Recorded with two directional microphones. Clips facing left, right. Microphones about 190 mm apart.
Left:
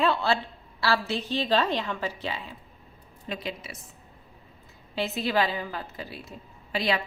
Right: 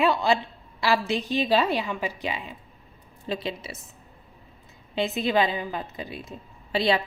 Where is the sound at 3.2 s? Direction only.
25° right (ahead or behind).